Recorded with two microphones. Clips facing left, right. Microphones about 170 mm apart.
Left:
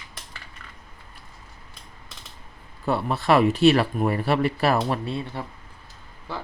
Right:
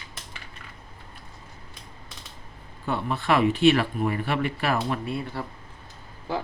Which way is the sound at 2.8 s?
35° left (ahead or behind).